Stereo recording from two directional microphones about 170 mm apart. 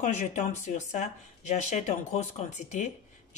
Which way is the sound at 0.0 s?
40° left (ahead or behind).